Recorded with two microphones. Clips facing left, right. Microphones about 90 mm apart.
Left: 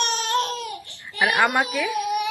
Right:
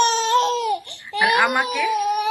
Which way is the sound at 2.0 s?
40° right (ahead or behind).